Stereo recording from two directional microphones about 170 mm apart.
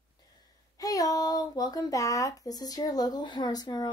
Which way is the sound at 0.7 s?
20° left (ahead or behind).